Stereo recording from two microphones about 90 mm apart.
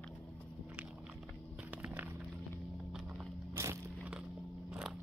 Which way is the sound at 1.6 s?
15° right (ahead or behind).